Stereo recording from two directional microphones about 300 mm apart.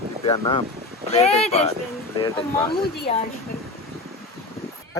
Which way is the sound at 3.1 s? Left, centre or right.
Left.